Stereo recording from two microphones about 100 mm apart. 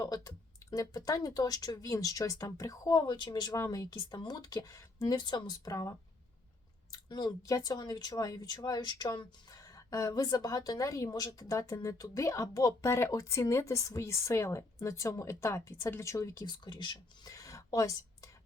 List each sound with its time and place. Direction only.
0.0 s speech: 40° left (ahead or behind)
5.1 s speech: 45° left (ahead or behind)
6.9 s speech: 45° left (ahead or behind)
16.5 s speech: 50° left (ahead or behind)